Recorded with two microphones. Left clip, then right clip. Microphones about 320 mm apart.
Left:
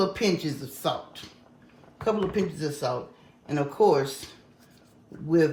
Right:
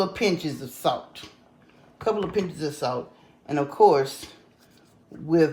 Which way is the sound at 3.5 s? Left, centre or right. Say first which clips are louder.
Right 4 dB; centre.